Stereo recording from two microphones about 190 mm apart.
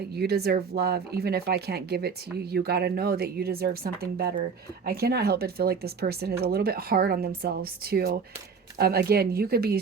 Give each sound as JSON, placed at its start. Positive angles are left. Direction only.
{"t": 0.2, "sound": "speech", "side_deg": -55}